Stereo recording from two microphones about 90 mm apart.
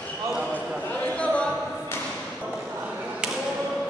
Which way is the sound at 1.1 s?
10° left (ahead or behind).